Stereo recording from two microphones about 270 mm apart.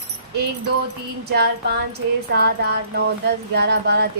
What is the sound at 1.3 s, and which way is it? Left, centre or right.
Music, right.